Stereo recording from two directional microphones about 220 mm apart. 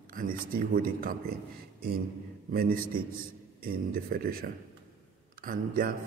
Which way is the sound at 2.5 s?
45° right (ahead or behind).